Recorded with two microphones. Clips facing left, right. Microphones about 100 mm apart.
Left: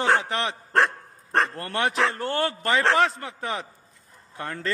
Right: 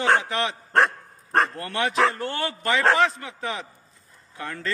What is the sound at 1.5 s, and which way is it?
A man's voice, 40° left (ahead or behind).